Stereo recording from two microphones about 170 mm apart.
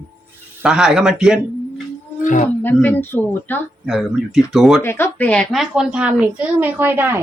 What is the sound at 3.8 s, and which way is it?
Speech, centre (ahead or behind).